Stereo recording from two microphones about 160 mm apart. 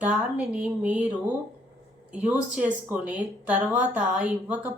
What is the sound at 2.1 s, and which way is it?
Speech, 10° right (ahead or behind).